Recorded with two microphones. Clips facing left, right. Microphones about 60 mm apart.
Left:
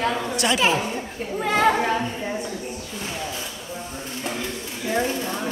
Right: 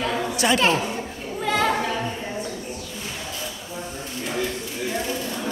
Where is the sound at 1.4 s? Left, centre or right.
Centre.